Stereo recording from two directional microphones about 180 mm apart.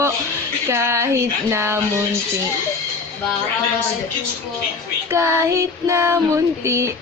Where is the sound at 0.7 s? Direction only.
15° right (ahead or behind).